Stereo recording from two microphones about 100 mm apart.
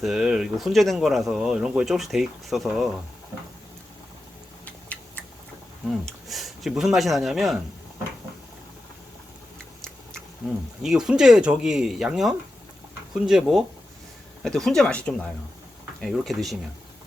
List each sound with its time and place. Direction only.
0.0 s speech: 5° right (ahead or behind)
4.6 s a sound: 15° left (ahead or behind)
5.9 s speech: centre (ahead or behind)
10.8 s speech: 5° right (ahead or behind)